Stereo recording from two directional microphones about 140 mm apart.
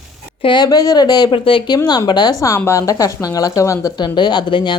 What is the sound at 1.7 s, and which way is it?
A woman's voice, 25° left (ahead or behind).